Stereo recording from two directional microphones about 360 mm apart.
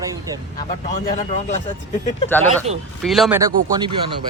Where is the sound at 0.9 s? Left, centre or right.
Centre.